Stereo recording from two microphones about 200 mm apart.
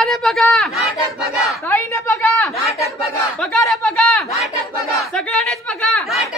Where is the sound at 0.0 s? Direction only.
Centre (ahead or behind).